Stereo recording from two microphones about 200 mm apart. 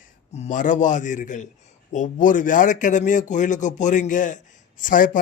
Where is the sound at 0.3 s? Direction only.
35° left (ahead or behind).